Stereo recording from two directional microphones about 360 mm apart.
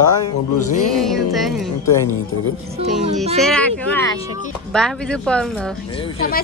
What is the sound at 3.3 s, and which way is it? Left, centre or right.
A woman's voice, centre.